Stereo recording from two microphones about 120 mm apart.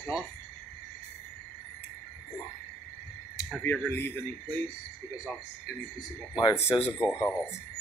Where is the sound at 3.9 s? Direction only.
15° left (ahead or behind).